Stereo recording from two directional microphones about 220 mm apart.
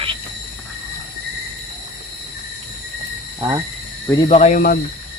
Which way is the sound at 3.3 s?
20° right (ahead or behind).